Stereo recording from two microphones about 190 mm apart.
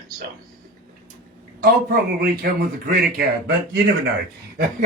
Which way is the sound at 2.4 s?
50° right (ahead or behind).